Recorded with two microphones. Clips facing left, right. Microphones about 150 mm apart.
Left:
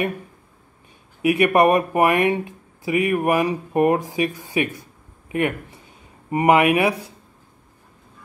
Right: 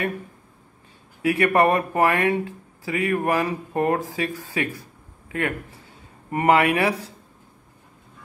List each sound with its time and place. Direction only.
1.2 s speech: 15° left (ahead or behind)